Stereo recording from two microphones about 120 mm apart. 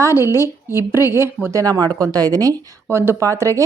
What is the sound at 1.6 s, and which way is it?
Speech, 30° right (ahead or behind).